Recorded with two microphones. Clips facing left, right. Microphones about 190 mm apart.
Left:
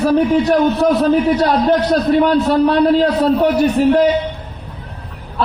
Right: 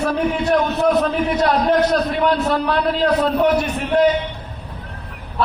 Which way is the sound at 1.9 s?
35° left (ahead or behind).